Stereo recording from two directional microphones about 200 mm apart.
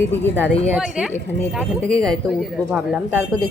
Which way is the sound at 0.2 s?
10° left (ahead or behind).